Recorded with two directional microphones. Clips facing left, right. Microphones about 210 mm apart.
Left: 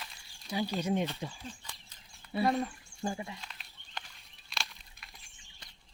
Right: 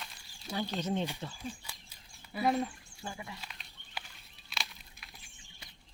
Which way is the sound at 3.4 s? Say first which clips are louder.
Even; 5° right (ahead or behind).